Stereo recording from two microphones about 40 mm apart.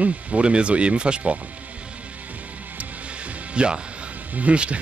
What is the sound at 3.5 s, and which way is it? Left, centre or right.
Speech, right.